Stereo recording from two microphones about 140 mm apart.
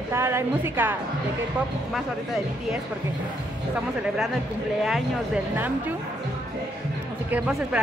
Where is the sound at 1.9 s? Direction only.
Centre (ahead or behind).